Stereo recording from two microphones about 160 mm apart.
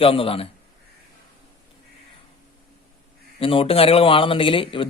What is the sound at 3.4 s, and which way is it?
Speech, 35° left (ahead or behind).